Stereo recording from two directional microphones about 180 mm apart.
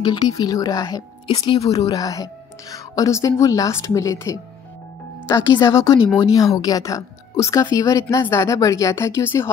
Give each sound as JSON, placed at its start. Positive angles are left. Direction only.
{"t": 0.0, "sound": "a woman's voice", "side_deg": 20}
{"t": 1.3, "sound": "speech", "side_deg": 30}
{"t": 1.9, "sound": "a woman's voice", "side_deg": 20}